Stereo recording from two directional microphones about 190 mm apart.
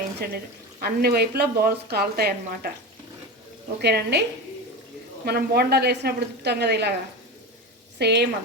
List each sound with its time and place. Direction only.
0.2 s speech: 50° right (ahead or behind)
3.8 s speech: 60° right (ahead or behind)
7.9 s speech: 60° right (ahead or behind)